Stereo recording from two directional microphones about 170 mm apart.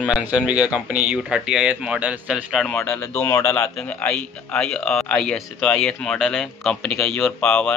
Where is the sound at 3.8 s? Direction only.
5° left (ahead or behind).